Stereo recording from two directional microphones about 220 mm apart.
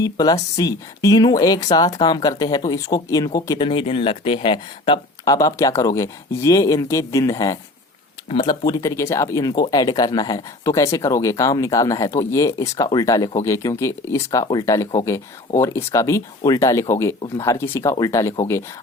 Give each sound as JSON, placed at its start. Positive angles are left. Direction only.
{"t": 0.0, "sound": "speech", "side_deg": 15}